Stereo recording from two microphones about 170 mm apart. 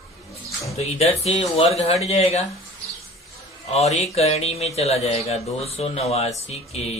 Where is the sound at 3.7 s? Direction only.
40° left (ahead or behind).